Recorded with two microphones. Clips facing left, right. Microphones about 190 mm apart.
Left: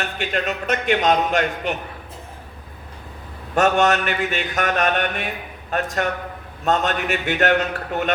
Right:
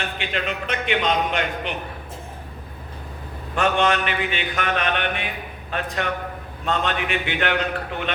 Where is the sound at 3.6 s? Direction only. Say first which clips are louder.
Left 3 dB; 45° left (ahead or behind).